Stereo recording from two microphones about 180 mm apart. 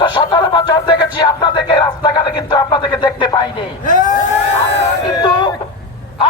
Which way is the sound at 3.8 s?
45° left (ahead or behind).